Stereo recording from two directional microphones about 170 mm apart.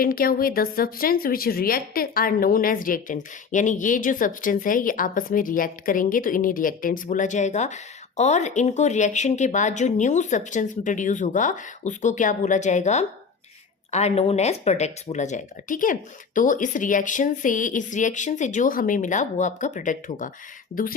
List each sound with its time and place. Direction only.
0.0 s a woman's voice: 60° left (ahead or behind)